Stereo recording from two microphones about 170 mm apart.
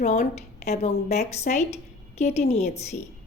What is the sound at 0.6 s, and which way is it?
A woman's voice, 40° left (ahead or behind).